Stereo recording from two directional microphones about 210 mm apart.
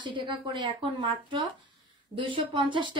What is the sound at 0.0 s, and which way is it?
Speech, 20° right (ahead or behind).